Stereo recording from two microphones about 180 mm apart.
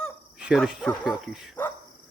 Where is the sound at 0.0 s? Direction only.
5° right (ahead or behind).